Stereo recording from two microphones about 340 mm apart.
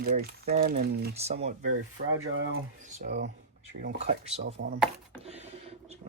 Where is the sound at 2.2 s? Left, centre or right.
Right.